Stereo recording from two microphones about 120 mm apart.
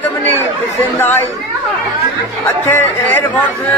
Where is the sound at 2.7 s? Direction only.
15° left (ahead or behind).